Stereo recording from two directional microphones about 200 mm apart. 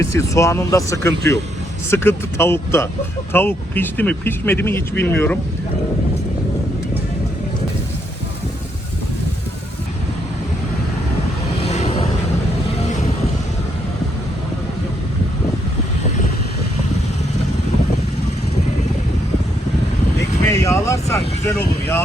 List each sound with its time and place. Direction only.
0.0 s speech: 15° left (ahead or behind)
11.6 s vehicle: 30° left (ahead or behind)
20.5 s vehicle: 15° left (ahead or behind)